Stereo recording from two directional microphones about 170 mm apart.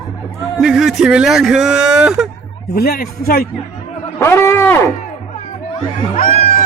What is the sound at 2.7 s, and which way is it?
Speech, 65° left (ahead or behind).